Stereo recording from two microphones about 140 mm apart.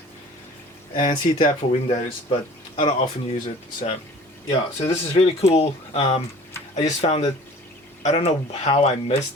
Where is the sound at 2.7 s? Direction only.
45° left (ahead or behind).